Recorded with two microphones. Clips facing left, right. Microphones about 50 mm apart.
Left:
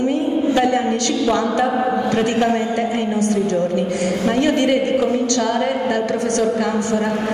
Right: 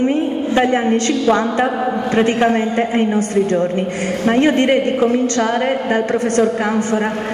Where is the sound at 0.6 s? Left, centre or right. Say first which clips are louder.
Right 2 dB; right.